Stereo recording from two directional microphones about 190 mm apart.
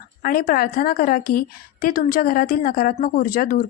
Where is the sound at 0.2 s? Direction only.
50° left (ahead or behind).